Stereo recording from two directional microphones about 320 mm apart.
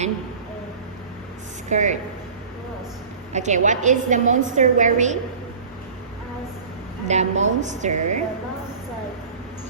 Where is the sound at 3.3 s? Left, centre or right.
Right.